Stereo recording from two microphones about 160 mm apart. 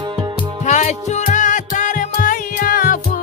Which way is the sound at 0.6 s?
50° left (ahead or behind).